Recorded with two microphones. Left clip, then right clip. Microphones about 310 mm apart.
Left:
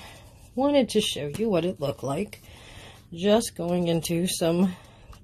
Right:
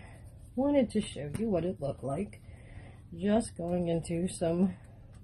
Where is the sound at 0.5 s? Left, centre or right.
Left.